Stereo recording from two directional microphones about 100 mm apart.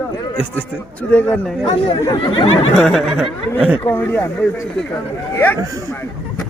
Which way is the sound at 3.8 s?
25° left (ahead or behind).